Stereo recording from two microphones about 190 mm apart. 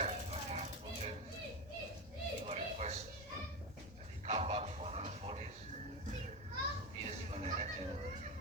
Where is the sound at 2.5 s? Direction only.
35° right (ahead or behind).